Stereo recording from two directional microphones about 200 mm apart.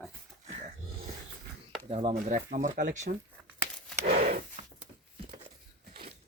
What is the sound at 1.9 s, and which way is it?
Speech, 30° right (ahead or behind).